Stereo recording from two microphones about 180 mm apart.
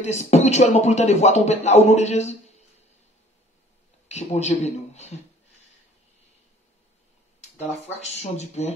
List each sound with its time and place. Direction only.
0.0 s speech: 40° left (ahead or behind)
4.1 s speech: 40° left (ahead or behind)
7.8 s speech: 35° left (ahead or behind)